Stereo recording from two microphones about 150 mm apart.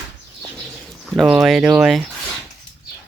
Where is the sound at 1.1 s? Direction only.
Centre (ahead or behind).